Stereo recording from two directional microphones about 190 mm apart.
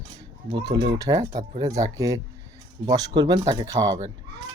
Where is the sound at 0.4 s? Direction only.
20° right (ahead or behind).